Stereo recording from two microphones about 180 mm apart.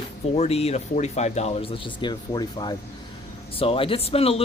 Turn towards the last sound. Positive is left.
turn(degrees=35)  # may be behind; listen again after turning